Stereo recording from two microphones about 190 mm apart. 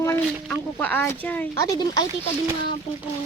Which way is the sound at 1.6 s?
20° left (ahead or behind).